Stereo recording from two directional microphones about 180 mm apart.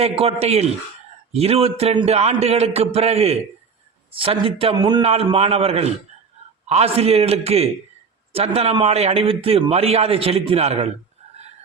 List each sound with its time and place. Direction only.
0.0 s a man's voice: 35° right (ahead or behind)